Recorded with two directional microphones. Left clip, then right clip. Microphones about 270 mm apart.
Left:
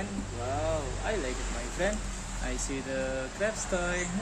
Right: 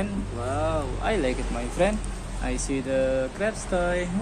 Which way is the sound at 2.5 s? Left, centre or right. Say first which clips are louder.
Right 8 dB; centre.